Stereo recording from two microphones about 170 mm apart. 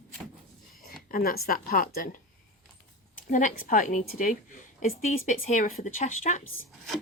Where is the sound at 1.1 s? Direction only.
60° left (ahead or behind).